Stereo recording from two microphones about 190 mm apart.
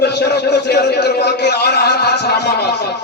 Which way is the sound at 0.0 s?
60° left (ahead or behind).